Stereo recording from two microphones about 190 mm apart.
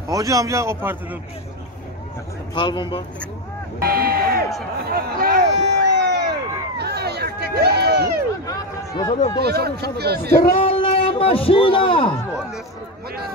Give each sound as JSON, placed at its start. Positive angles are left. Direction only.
{"t": 0.1, "sound": "speech", "side_deg": -15}
{"t": 2.5, "sound": "speech", "side_deg": 25}
{"t": 3.8, "sound": "speech", "side_deg": -50}
{"t": 4.9, "sound": "run", "side_deg": -55}
{"t": 6.8, "sound": "a sound", "side_deg": -60}
{"t": 8.5, "sound": "speech", "side_deg": 20}
{"t": 9.4, "sound": "speech", "side_deg": -55}
{"t": 10.4, "sound": "speech", "side_deg": 30}